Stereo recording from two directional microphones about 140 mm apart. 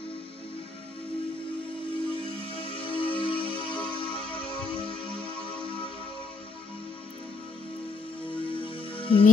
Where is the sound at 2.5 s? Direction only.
40° left (ahead or behind).